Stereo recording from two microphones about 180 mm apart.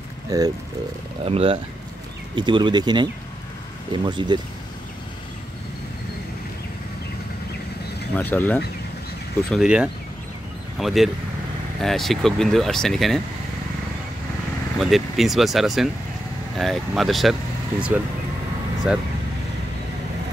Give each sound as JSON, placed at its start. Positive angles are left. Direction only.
{"t": 0.3, "sound": "speech", "side_deg": -20}
{"t": 1.2, "sound": "speech", "side_deg": -30}
{"t": 8.2, "sound": "speech", "side_deg": 10}
{"t": 9.5, "sound": "speech", "side_deg": -5}
{"t": 14.8, "sound": "speech", "side_deg": 0}